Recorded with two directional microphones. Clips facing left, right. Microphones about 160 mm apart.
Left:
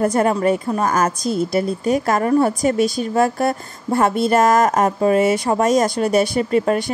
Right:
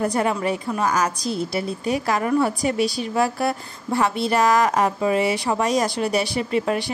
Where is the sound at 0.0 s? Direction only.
45° left (ahead or behind).